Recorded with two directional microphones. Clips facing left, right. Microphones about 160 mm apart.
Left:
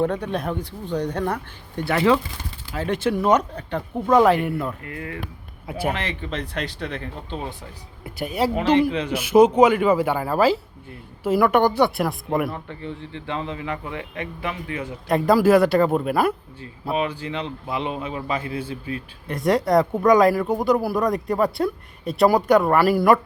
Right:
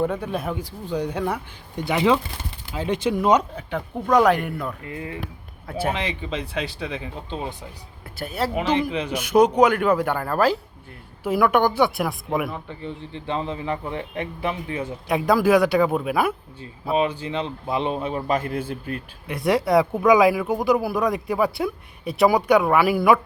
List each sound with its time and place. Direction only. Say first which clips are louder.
0.0 s speech: left 1 dB; 5° right (ahead or behind)
4.8 s a man's voice: even; 20° right (ahead or behind)
5.6 s speech: even; 10° left (ahead or behind)
5.9 s speech: right 1 dB; 15° right (ahead or behind)
8.0 s speech: left 3 dB; 15° left (ahead or behind)
8.9 s speech: left 2 dB; 10° right (ahead or behind)
9.1 s speech: left 2 dB; 5° left (ahead or behind)
12.6 s a man's voice: even; 20° right (ahead or behind)
15.0 s speech: left 2 dB; centre (ahead or behind)
16.9 s a man's voice: right 2 dB; 25° right (ahead or behind)
18.3 s a man's voice: right 3 dB; 45° right (ahead or behind)
19.3 s speech: even; centre (ahead or behind)